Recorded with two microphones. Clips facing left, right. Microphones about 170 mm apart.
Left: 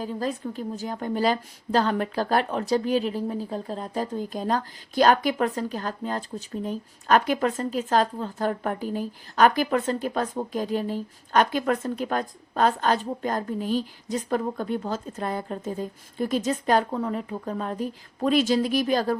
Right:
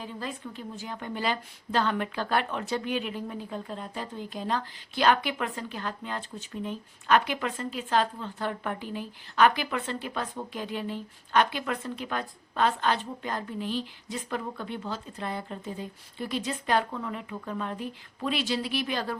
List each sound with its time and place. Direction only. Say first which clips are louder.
0.0 s a woman's voice: left 8 dB; 40° left (ahead or behind)